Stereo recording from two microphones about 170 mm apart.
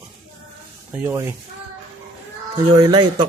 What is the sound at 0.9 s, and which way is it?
Speech, 15° right (ahead or behind).